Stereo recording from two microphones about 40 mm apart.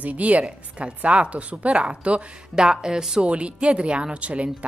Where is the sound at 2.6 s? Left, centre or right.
Centre.